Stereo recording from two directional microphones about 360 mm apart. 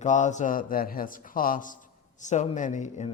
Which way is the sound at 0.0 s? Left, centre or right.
Centre.